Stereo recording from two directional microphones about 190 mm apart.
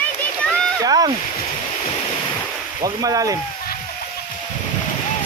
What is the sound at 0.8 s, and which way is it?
Speech, 20° right (ahead or behind).